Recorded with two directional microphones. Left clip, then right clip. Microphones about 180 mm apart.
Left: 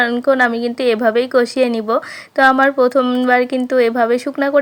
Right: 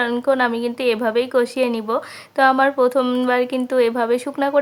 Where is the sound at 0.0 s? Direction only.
20° left (ahead or behind).